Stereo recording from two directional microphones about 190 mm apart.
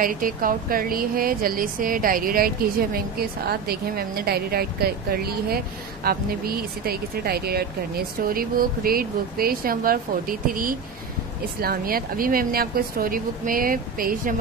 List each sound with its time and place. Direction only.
0.0 s speech: 50° right (ahead or behind)